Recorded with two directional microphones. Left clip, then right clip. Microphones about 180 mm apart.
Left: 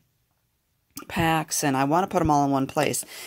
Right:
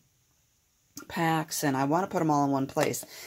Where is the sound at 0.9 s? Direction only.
45° left (ahead or behind).